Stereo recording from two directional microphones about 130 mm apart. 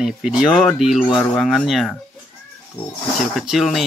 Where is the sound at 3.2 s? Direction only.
Centre (ahead or behind).